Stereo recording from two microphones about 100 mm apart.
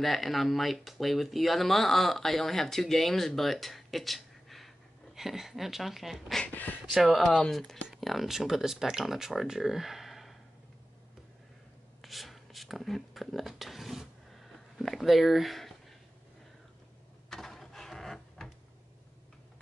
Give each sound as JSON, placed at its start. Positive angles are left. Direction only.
{"t": 0.0, "sound": "speech", "side_deg": 0}
{"t": 6.4, "sound": "speech", "side_deg": 20}
{"t": 6.9, "sound": "speech", "side_deg": 0}
{"t": 12.0, "sound": "a sound", "side_deg": 0}
{"t": 17.3, "sound": "printer", "side_deg": 5}